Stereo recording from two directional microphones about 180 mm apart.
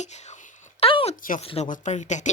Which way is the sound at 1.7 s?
40° left (ahead or behind).